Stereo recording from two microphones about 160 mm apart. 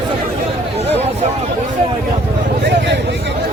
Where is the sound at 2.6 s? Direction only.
90° right.